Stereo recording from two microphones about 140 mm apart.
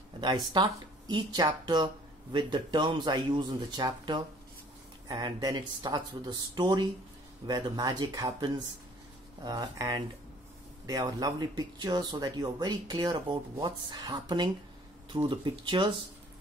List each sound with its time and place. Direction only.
0.2 s speech: 30° right (ahead or behind)